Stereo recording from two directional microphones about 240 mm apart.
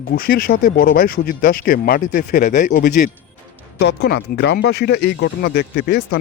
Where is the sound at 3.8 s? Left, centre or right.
Left.